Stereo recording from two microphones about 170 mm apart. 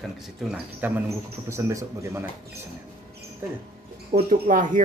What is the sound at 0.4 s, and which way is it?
Speech, 5° right (ahead or behind).